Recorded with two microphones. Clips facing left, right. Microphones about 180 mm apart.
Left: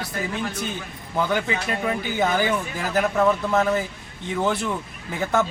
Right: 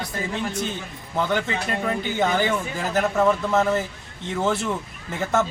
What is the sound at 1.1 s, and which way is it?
Speech, 5° left (ahead or behind).